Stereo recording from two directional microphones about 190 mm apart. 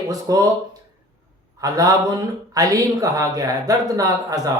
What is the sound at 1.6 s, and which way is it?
A man's voice, 20° right (ahead or behind).